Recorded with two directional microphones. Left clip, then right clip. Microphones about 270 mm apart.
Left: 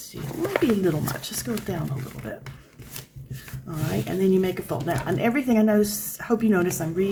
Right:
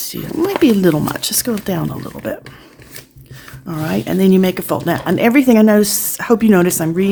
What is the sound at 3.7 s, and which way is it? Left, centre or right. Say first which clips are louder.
Speech: right 9 dB; right.